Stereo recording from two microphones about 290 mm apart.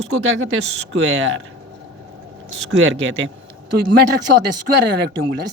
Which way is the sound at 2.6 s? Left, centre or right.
Right.